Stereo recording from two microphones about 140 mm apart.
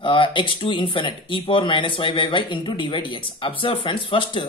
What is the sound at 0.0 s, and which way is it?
Speech, 35° left (ahead or behind).